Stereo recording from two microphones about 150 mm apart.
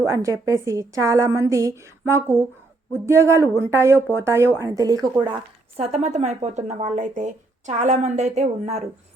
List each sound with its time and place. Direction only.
0.0 s a woman's voice: 20° right (ahead or behind)
5.2 s a woman's voice: 40° right (ahead or behind)